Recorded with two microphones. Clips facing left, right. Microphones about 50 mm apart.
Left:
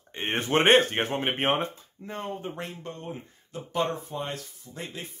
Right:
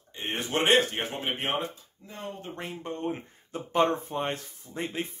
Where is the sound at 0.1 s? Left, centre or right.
Left.